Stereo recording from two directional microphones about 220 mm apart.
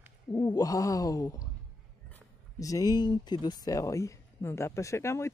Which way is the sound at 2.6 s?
15° left (ahead or behind).